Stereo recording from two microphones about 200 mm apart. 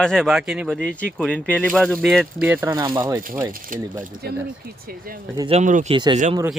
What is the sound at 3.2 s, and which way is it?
Speech, 45° right (ahead or behind).